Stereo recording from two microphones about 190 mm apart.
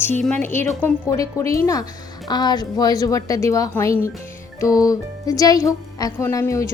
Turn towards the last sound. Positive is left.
turn(degrees=15)  # may be behind; listen again after turning